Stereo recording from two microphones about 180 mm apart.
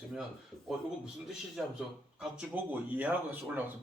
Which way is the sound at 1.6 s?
5° right (ahead or behind).